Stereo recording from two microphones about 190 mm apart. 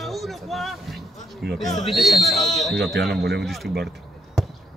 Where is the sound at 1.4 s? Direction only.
55° right (ahead or behind).